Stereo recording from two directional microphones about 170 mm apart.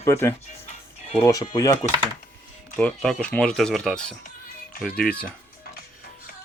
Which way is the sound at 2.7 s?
5° left (ahead or behind).